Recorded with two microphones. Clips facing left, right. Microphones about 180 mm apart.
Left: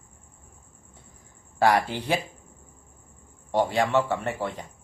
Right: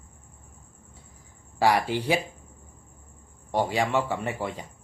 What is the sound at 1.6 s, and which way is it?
Speech, 10° right (ahead or behind).